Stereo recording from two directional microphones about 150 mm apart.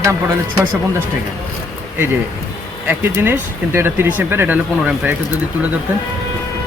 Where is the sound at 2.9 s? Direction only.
15° right (ahead or behind).